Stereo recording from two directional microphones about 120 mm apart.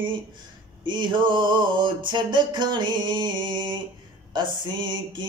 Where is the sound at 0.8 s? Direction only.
40° right (ahead or behind).